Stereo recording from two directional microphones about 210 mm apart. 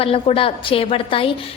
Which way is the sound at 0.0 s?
25° left (ahead or behind).